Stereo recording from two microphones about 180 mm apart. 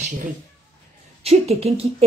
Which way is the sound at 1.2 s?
35° right (ahead or behind).